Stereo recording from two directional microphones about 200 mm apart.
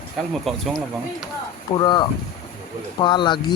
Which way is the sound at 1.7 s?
25° left (ahead or behind).